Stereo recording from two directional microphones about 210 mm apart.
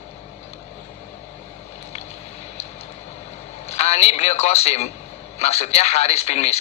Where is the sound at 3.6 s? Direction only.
30° left (ahead or behind).